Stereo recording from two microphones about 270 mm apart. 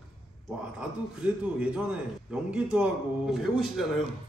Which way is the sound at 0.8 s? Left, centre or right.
Centre.